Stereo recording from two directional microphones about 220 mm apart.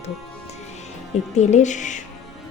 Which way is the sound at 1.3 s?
30° left (ahead or behind).